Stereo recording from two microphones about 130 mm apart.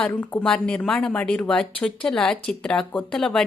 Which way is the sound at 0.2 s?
5° left (ahead or behind).